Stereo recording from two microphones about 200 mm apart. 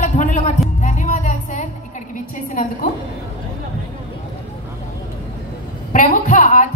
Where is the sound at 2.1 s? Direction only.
40° left (ahead or behind).